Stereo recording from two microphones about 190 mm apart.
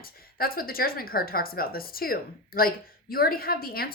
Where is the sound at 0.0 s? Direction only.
50° left (ahead or behind).